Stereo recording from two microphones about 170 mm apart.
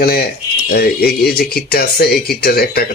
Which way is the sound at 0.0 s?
65° left (ahead or behind).